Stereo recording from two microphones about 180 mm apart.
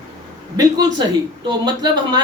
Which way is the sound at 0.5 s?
20° right (ahead or behind).